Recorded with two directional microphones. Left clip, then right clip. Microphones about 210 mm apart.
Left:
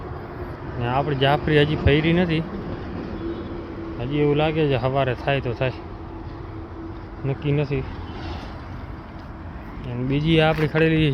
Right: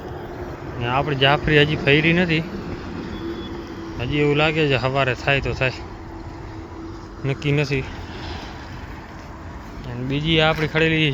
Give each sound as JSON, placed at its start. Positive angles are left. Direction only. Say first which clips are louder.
{"t": 0.8, "sound": "speech", "louder": "right 2 dB", "side_deg": 10}
{"t": 3.9, "sound": "speech", "louder": "right 2 dB", "side_deg": 0}
{"t": 7.3, "sound": "speech", "louder": "right 3 dB", "side_deg": -5}
{"t": 10.1, "sound": "speech", "louder": "right 1 dB", "side_deg": 20}